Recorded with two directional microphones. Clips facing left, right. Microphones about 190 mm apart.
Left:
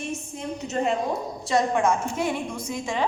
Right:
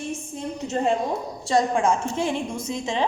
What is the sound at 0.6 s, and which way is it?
A woman's voice, 30° right (ahead or behind).